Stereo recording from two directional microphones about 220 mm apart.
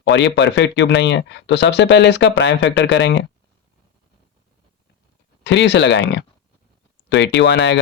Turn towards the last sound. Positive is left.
turn(degrees=55)  # may be behind; listen again after turning